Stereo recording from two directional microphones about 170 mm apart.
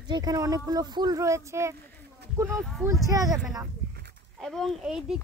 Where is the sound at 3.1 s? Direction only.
20° right (ahead or behind).